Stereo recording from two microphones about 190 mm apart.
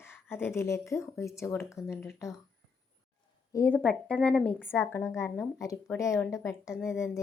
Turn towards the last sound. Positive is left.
turn(degrees=-5)  # may be behind; listen again after turning